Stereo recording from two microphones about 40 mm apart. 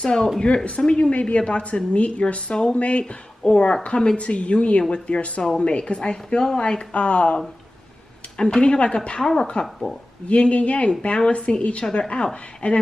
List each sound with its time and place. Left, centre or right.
0.0 s a woman's voice: centre
6.9 s a woman's voice: left
8.4 s a woman's voice: left
9.2 s speech: centre
10.2 s a woman's voice: left